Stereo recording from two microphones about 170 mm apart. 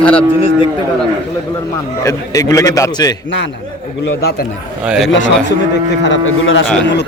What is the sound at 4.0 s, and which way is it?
Speech, 65° left (ahead or behind).